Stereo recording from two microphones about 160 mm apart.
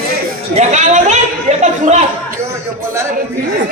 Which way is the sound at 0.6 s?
45° right (ahead or behind).